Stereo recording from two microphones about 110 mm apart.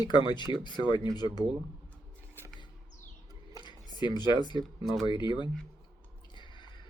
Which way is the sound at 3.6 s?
45° left (ahead or behind).